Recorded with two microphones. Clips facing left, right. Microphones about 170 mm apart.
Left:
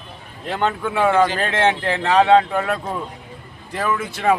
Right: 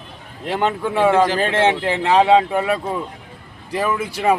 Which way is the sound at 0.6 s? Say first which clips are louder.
Right 2 dB; 10° right (ahead or behind).